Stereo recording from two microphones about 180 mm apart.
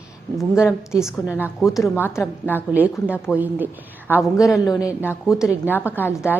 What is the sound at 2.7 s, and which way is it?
Speech, 10° right (ahead or behind).